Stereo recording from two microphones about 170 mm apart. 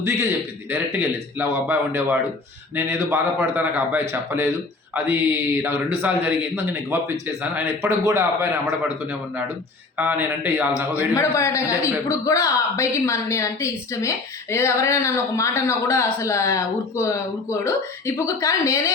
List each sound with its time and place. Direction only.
0.7 s a man's voice: 10° right (ahead or behind)
7.5 s a man's voice: 15° right (ahead or behind)
10.0 s a man's voice: 10° right (ahead or behind)
11.1 s a man's voice: 15° left (ahead or behind)